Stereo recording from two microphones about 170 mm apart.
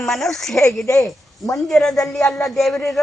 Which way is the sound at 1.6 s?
Centre (ahead or behind).